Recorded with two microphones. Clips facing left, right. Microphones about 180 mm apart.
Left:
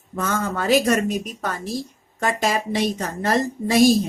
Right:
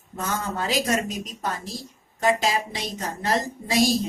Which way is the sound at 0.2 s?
50° left (ahead or behind).